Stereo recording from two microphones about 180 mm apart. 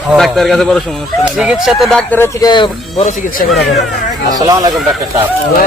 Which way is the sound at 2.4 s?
25° left (ahead or behind).